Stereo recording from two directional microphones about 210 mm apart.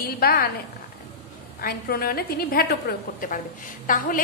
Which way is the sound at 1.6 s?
45° left (ahead or behind).